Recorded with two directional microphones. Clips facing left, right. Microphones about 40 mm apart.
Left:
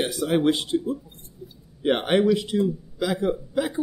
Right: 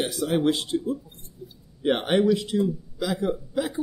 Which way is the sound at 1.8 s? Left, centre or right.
Centre.